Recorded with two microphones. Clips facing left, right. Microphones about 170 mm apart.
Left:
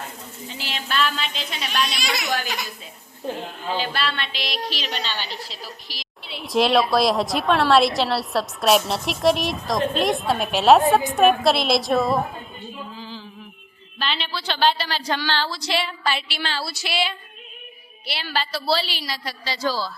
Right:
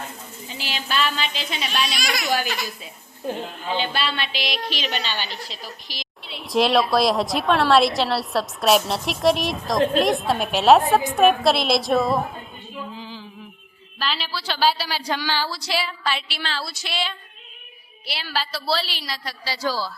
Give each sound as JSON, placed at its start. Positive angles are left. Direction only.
{"t": 0.5, "sound": "a woman's voice", "side_deg": 0}
{"t": 2.0, "sound": "speech", "side_deg": 25}
{"t": 3.2, "sound": "a woman's voice", "side_deg": -5}
{"t": 13.0, "sound": "music", "side_deg": -15}
{"t": 14.0, "sound": "a woman's voice", "side_deg": 0}
{"t": 19.5, "sound": "a man's voice", "side_deg": -10}